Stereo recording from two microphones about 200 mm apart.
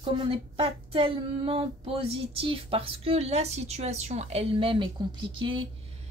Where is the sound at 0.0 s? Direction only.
25° right (ahead or behind).